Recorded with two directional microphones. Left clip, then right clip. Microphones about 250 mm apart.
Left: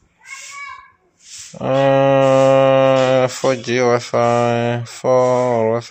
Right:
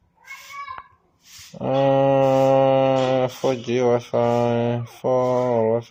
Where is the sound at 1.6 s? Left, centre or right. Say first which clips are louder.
Left 4 dB; centre.